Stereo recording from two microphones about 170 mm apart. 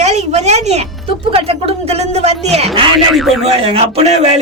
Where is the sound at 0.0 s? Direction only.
40° right (ahead or behind).